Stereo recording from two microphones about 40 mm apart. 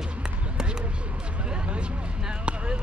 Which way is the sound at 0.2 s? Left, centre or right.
Centre.